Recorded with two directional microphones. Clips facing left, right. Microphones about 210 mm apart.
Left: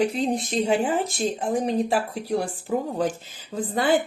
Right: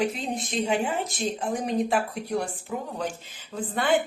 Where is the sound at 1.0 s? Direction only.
Centre (ahead or behind).